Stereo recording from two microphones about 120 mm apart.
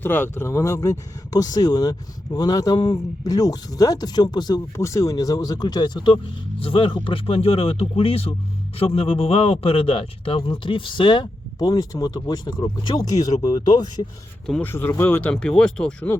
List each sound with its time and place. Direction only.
0.0 s a man's voice: 15° left (ahead or behind); by 13.9 s 35° left (ahead or behind)
14.6 s speech: 20° left (ahead or behind)